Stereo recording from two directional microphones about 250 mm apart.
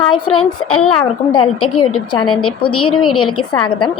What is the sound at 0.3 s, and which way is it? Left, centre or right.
A child's voice, left.